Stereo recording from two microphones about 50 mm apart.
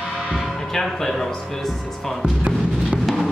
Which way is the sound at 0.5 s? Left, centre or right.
Centre.